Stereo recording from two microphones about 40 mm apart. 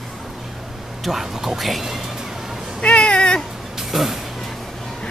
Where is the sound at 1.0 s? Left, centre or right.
Centre.